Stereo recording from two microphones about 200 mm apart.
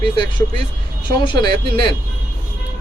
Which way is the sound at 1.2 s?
25° left (ahead or behind).